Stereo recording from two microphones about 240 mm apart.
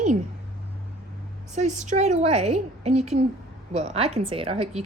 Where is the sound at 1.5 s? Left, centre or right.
Right.